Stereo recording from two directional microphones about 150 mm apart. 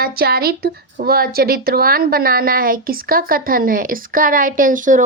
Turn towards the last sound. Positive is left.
turn(degrees=-60)  # may be behind; listen again after turning